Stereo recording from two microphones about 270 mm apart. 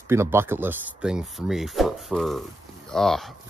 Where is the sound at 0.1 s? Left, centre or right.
Centre.